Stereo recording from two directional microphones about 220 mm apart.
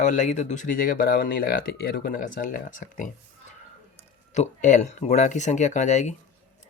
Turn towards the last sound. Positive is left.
turn(degrees=35)  # may be behind; listen again after turning